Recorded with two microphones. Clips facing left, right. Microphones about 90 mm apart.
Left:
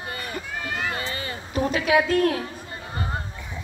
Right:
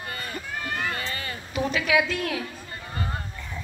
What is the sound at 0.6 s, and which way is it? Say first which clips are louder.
Run: even; 5° left (ahead or behind).